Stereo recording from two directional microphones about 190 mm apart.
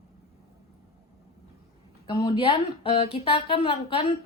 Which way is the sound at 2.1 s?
25° left (ahead or behind).